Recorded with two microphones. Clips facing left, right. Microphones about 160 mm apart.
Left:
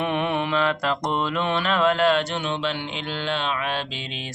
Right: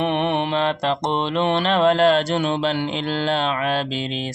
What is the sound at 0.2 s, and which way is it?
Mantra, 30° right (ahead or behind).